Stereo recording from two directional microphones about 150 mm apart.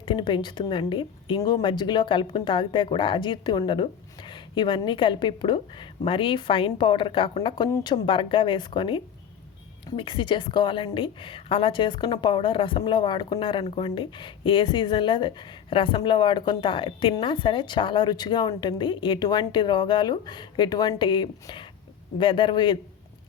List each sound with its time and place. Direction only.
0.0 s a woman's voice: 35° left (ahead or behind)